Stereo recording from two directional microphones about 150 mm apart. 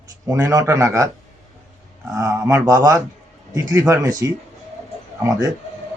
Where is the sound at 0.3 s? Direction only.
20° right (ahead or behind).